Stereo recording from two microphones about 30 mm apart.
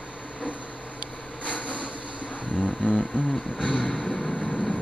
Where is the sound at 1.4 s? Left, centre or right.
Left.